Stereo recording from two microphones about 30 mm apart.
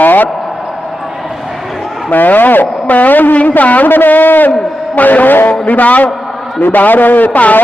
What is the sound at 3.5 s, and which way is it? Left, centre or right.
A man's voice, left.